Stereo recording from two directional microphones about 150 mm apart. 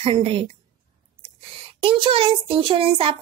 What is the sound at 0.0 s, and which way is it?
Speech, 40° right (ahead or behind).